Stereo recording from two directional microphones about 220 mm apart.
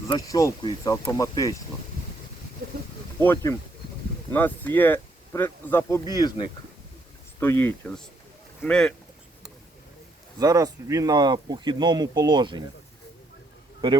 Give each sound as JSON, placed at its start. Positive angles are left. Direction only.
{"t": 0.1, "sound": "speech", "side_deg": 15}
{"t": 3.2, "sound": "speech", "side_deg": 10}
{"t": 10.3, "sound": "speech", "side_deg": -15}